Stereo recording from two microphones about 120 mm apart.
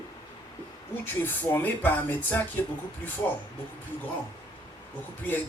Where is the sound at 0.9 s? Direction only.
15° left (ahead or behind).